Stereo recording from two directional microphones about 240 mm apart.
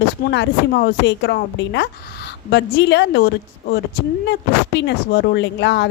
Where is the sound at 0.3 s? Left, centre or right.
Left.